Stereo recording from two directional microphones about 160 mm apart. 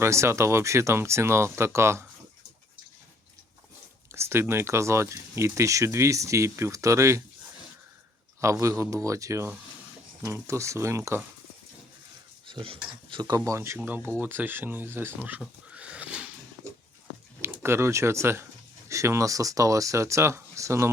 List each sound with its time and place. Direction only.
0.0 s speech: 15° right (ahead or behind)
4.1 s speech: 15° right (ahead or behind)
8.6 s speech: 15° right (ahead or behind)
12.5 s speech: 30° right (ahead or behind); by 15.4 s 10° right (ahead or behind)
15.4 s pig: 5° right (ahead or behind)
17.4 s speech: 15° right (ahead or behind)